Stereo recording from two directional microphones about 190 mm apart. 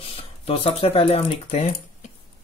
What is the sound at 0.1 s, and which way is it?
Speech, 30° left (ahead or behind).